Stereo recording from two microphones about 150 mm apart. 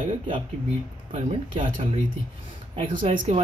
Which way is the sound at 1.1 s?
50° right (ahead or behind).